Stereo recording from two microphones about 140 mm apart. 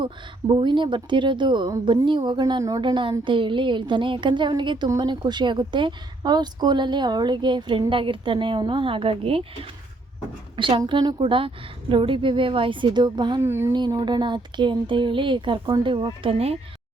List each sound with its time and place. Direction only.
0.0 s speech: 35° right (ahead or behind)
10.6 s speech: 35° right (ahead or behind)
13.4 s a woman's voice: 20° right (ahead or behind)
13.7 s speech: 30° right (ahead or behind)